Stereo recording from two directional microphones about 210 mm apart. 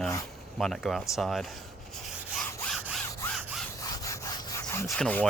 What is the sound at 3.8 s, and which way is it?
Sawing, 15° left (ahead or behind).